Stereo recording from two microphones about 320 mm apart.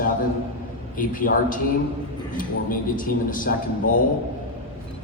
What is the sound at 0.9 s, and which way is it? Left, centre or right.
A man's voice, left.